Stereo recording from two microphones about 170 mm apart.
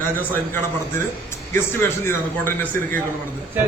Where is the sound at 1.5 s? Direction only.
15° left (ahead or behind).